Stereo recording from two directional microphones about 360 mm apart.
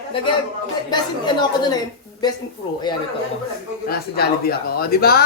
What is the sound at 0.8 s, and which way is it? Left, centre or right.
Speech, centre.